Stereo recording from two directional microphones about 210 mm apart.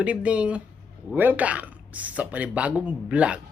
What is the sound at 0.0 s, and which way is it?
Speech, 5° right (ahead or behind).